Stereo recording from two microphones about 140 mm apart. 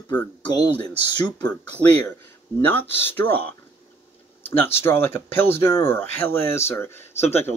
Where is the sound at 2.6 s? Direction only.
15° left (ahead or behind).